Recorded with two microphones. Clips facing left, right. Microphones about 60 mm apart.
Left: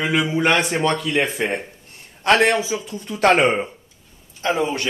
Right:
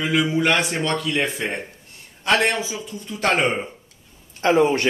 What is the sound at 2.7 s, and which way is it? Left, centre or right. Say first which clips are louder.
Speech: left 5 dB; left.